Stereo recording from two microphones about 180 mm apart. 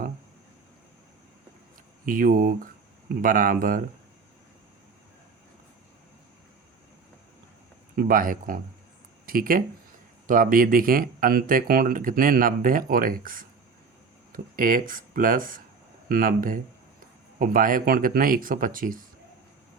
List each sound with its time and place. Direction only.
2.0 s speech: 50° right (ahead or behind)
7.9 s speech: 55° right (ahead or behind)